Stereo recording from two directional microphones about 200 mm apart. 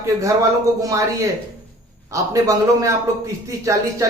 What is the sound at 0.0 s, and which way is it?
A man's voice, 15° right (ahead or behind).